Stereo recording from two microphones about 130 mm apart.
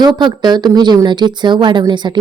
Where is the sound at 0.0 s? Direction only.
35° right (ahead or behind).